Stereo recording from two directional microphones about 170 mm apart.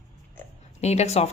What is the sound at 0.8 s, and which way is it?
Speech, 40° left (ahead or behind).